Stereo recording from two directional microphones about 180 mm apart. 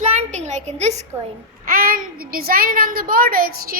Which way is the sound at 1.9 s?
55° right (ahead or behind).